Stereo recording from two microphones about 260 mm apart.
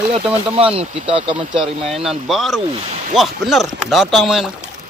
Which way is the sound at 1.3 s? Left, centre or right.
Centre.